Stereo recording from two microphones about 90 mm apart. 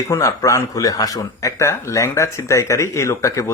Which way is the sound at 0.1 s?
35° left (ahead or behind).